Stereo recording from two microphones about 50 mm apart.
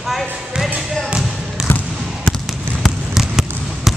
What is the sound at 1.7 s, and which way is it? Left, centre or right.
Trickle, left.